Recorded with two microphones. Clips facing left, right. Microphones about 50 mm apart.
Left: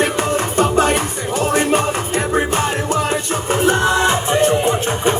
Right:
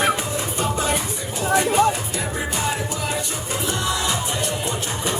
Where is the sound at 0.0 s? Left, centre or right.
Left.